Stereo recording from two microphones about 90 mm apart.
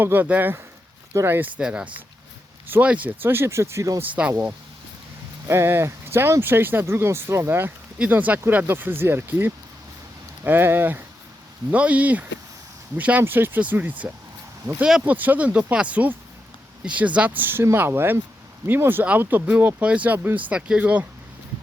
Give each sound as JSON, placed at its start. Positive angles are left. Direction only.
{"t": 0.0, "sound": "speech", "side_deg": -20}
{"t": 4.0, "sound": "speech", "side_deg": -20}
{"t": 7.9, "sound": "speech", "side_deg": -15}
{"t": 15.0, "sound": "speech", "side_deg": -20}